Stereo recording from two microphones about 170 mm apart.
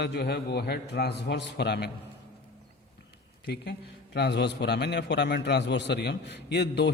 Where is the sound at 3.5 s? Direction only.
75° left (ahead or behind).